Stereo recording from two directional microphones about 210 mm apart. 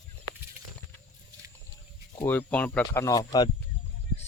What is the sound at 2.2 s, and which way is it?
Speech, 10° left (ahead or behind).